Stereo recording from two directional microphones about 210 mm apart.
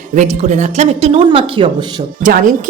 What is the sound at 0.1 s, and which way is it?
Speech, 35° right (ahead or behind).